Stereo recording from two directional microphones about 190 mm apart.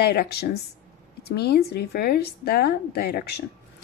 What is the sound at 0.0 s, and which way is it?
Speech, 55° left (ahead or behind).